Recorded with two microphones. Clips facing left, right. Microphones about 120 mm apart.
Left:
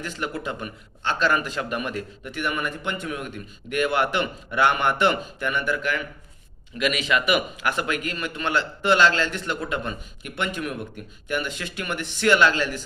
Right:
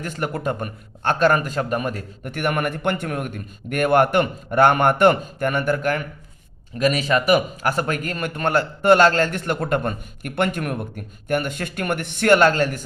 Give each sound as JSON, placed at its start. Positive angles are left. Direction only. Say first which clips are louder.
{"t": 0.0, "sound": "a man's voice", "louder": "right 5 dB", "side_deg": -50}
{"t": 2.3, "sound": "a man's voice", "louder": "right 5 dB", "side_deg": -55}